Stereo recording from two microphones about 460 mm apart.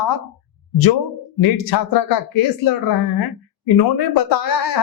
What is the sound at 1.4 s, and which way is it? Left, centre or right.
Speech, left.